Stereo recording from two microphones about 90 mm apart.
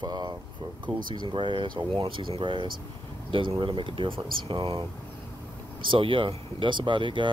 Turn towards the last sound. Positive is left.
turn(degrees=-70)  # may be behind; listen again after turning